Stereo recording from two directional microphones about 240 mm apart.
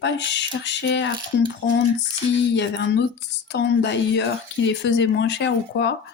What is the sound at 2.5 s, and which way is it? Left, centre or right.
A woman's voice, left.